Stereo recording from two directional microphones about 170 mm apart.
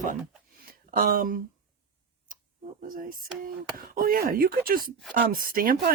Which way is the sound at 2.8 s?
55° right (ahead or behind).